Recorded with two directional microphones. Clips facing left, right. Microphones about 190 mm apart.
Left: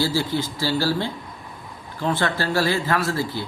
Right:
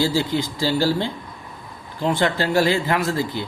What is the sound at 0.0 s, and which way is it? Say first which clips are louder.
Speech: right 2 dB; 15° right (ahead or behind).